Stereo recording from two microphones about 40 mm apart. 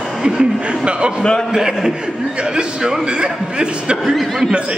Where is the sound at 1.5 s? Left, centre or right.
Centre.